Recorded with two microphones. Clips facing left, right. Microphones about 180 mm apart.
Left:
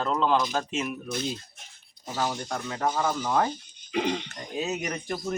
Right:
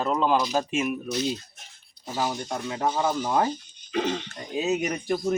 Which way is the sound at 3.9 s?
15° left (ahead or behind).